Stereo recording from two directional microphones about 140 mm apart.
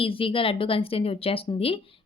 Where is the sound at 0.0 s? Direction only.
40° left (ahead or behind).